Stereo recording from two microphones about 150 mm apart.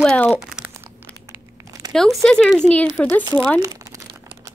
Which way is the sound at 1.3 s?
25° right (ahead or behind).